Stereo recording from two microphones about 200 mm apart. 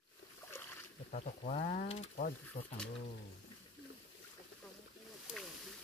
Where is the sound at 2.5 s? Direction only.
45° left (ahead or behind).